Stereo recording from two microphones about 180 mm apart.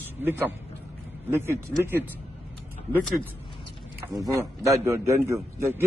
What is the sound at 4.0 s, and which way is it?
A man's voice, 20° right (ahead or behind).